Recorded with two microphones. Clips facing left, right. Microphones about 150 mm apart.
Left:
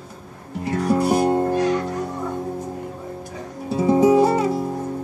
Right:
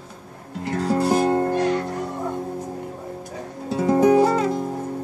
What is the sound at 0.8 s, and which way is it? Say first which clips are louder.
Music: left 1 dB; 10° left (ahead or behind).